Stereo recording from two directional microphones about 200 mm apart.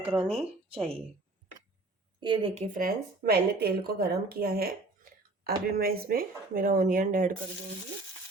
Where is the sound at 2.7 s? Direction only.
45° right (ahead or behind).